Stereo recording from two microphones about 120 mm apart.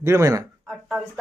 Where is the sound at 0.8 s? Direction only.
5° right (ahead or behind).